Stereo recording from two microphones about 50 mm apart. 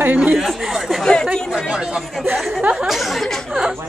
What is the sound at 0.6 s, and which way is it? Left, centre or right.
Mantra, centre.